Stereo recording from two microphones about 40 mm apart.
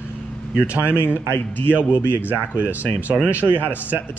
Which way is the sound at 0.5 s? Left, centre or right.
Right.